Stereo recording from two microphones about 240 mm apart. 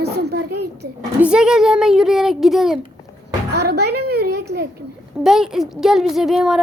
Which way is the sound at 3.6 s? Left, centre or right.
Right.